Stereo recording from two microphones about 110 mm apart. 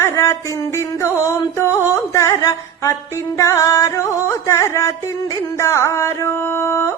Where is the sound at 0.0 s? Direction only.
25° left (ahead or behind).